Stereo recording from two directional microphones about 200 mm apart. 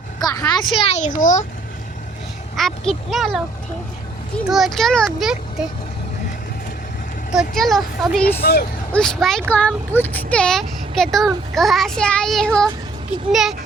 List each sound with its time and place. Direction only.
0.2 s a sound: 20° left (ahead or behind)
0.8 s a child's voice: 35° left (ahead or behind)
2.6 s speech: centre (ahead or behind)
4.4 s speech: centre (ahead or behind)
7.3 s speech: centre (ahead or behind)